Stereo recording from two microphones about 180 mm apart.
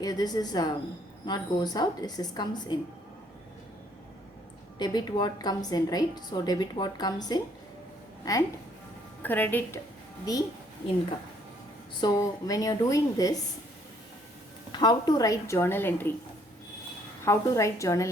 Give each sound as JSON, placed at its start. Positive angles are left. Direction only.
{"t": 0.0, "sound": "a woman's voice", "side_deg": 20}
{"t": 4.8, "sound": "a woman's voice", "side_deg": 25}
{"t": 11.9, "sound": "a woman's voice", "side_deg": 20}
{"t": 14.7, "sound": "a woman's voice", "side_deg": 25}
{"t": 17.2, "sound": "a woman's voice", "side_deg": 15}